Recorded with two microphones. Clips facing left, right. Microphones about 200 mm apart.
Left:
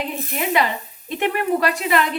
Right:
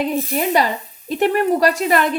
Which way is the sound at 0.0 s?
40° right (ahead or behind).